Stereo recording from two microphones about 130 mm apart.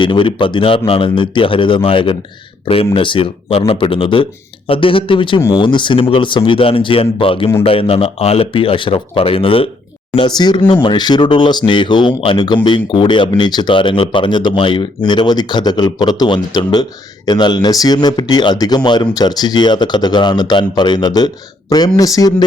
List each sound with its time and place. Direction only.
0.0 s speech: 40° left (ahead or behind)
10.2 s speech: 35° left (ahead or behind)